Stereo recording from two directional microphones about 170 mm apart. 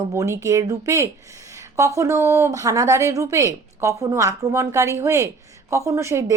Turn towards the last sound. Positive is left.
turn(degrees=-15)  # may be behind; listen again after turning